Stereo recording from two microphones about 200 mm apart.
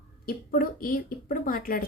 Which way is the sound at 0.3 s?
45° left (ahead or behind).